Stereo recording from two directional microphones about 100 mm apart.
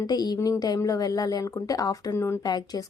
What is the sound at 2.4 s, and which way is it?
Speech, 40° left (ahead or behind).